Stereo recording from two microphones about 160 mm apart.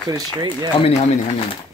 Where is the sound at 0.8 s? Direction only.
40° left (ahead or behind).